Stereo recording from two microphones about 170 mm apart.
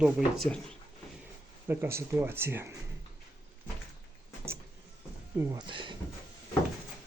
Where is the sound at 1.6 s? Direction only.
10° right (ahead or behind).